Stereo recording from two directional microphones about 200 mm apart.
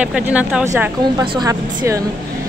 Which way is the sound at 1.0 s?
25° right (ahead or behind).